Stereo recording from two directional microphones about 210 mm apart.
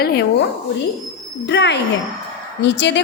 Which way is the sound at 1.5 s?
55° left (ahead or behind).